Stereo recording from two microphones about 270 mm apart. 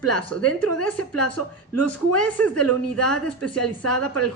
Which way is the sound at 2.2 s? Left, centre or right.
Centre.